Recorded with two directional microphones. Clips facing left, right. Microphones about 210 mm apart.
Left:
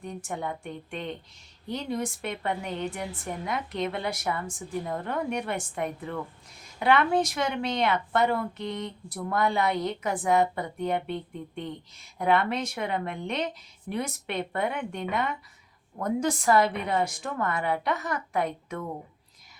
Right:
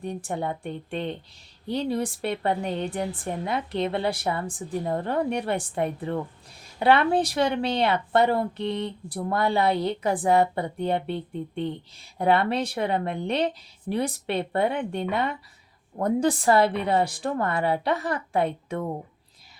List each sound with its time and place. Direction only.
0.0 s speech: 35° right (ahead or behind)